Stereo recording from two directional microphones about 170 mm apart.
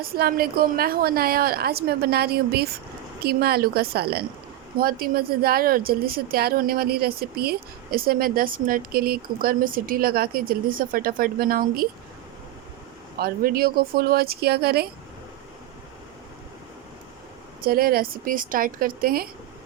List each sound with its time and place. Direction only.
0.0 s a woman's voice: 60° right (ahead or behind)
13.1 s a woman's voice: 60° right (ahead or behind)
17.6 s a woman's voice: 60° right (ahead or behind)